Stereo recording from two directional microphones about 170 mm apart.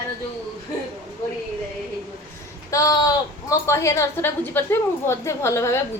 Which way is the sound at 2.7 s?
20° left (ahead or behind).